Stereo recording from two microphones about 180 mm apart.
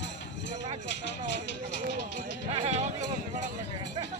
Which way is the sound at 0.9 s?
80° left.